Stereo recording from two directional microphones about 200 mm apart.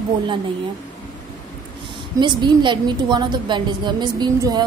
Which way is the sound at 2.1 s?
20° right (ahead or behind).